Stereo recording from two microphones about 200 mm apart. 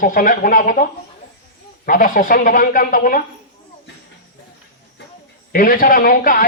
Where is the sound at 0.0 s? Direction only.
45° left (ahead or behind).